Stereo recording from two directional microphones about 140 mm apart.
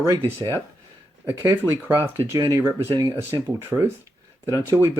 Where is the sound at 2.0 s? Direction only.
20° right (ahead or behind).